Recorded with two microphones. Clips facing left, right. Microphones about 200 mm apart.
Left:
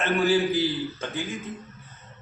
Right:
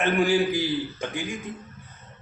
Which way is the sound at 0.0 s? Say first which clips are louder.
Right 1 dB; 15° right (ahead or behind).